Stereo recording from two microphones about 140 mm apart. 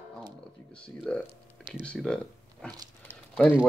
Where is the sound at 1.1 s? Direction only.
5° left (ahead or behind).